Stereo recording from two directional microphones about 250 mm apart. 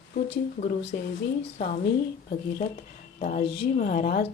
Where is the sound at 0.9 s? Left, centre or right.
Left.